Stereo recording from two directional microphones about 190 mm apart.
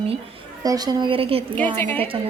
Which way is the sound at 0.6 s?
20° right (ahead or behind).